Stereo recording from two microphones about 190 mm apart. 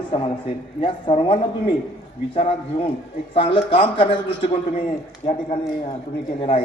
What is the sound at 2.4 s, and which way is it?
A man's voice, 30° left (ahead or behind).